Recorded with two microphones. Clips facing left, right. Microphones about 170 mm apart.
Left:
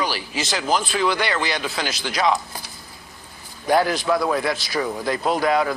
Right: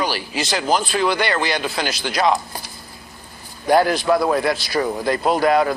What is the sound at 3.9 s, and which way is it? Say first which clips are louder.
A man's voice: right 3 dB; 45° right (ahead or behind).